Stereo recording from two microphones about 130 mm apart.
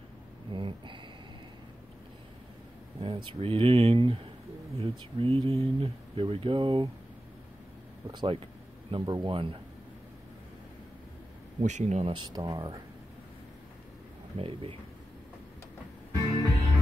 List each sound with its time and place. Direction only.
0.5 s a sound: 40° right (ahead or behind)
3.0 s speech: 40° right (ahead or behind)
8.1 s speech: 35° right (ahead or behind)
11.6 s speech: 65° right (ahead or behind)
12.1 s speech: 35° right (ahead or behind)
14.3 s speech: 45° right (ahead or behind)
16.2 s music: 35° right (ahead or behind)